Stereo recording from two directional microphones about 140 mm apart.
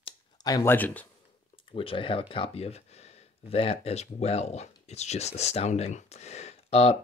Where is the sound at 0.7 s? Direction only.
10° left (ahead or behind).